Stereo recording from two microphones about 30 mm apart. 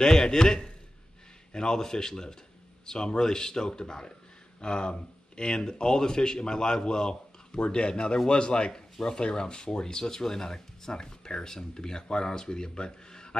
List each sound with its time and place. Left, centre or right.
0.0 s speech: centre